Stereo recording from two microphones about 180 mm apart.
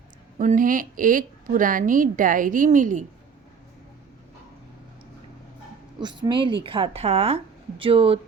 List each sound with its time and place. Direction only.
0.3 s a woman's voice: 45° right (ahead or behind)
6.0 s a woman's voice: 25° right (ahead or behind)